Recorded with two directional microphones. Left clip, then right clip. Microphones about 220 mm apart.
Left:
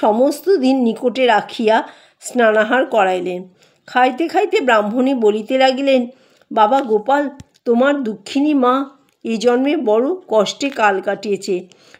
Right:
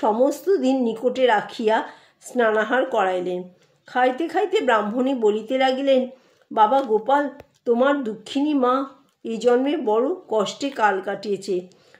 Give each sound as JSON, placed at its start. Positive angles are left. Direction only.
{"t": 0.0, "sound": "speech", "side_deg": 40}